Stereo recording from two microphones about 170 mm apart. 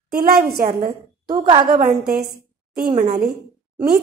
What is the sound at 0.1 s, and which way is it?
Speech, 65° right (ahead or behind).